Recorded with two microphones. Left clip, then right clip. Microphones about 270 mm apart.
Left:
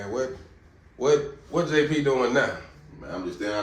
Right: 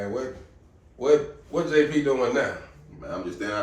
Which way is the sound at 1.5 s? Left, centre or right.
Left.